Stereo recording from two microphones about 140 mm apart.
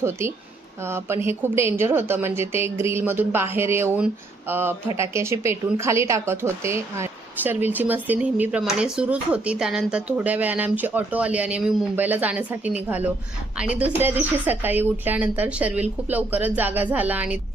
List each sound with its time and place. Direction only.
0.0 s a woman's voice: 20° right (ahead or behind)